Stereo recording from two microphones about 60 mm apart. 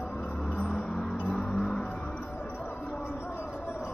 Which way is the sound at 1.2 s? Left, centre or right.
Centre.